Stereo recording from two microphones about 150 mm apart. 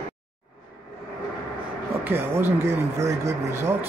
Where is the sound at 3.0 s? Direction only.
20° right (ahead or behind).